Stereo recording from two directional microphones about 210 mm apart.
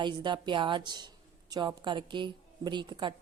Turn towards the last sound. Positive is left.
turn(degrees=-20)  # may be behind; listen again after turning